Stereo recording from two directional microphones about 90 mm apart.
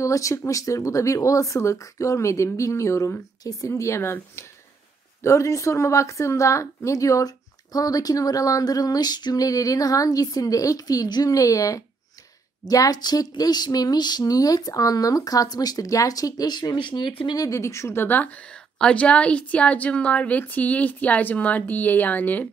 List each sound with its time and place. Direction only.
0.0 s a woman's voice: 35° left (ahead or behind); by 17.1 s 55° left (ahead or behind)
17.4 s a woman's voice: 35° left (ahead or behind); by 22.5 s 20° left (ahead or behind)